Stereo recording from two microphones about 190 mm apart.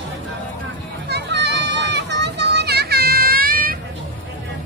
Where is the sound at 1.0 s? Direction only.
60° right (ahead or behind).